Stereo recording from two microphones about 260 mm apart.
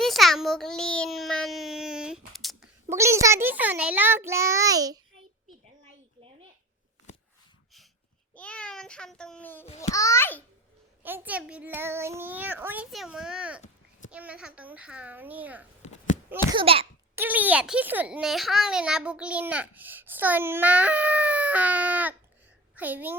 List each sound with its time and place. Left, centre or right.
0.0 s a sound: centre
2.9 s a child's voice: centre
7.1 s a sound: left
8.4 s a child's voice: centre
9.6 s a child's voice: left
9.9 s a child's voice: centre
11.0 s a child's voice: centre
15.8 s a sound: left
16.6 s a child's voice: right
17.2 s a child's voice: centre